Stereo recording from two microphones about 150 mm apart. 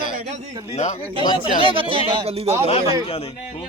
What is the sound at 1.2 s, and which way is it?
Speech, 30° left (ahead or behind).